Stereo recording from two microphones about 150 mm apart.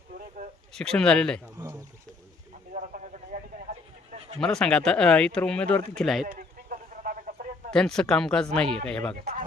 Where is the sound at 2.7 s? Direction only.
55° right (ahead or behind).